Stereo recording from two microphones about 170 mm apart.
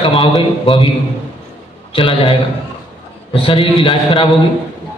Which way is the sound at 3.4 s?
30° left (ahead or behind).